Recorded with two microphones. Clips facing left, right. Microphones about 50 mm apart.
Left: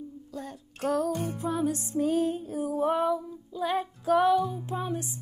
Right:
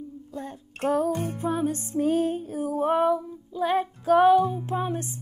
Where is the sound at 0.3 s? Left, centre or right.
Right.